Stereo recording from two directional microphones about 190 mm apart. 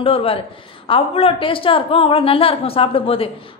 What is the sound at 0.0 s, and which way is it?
A woman's voice, 30° left (ahead or behind).